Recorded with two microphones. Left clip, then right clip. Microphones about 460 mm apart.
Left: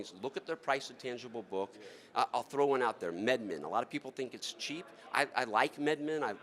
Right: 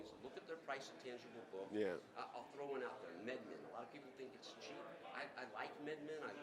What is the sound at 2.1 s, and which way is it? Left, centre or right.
A man's voice, left.